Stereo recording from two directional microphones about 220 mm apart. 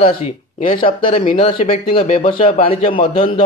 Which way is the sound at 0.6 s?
25° left (ahead or behind).